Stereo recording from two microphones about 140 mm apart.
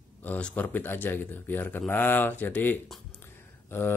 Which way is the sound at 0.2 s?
10° left (ahead or behind).